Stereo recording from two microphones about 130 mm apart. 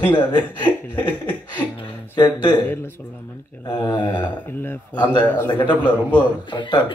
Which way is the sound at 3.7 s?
35° left (ahead or behind).